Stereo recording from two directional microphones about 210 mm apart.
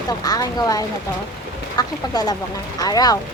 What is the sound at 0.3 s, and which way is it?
Speech, 15° left (ahead or behind).